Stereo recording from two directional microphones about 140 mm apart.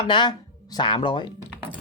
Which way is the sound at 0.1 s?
30° left (ahead or behind).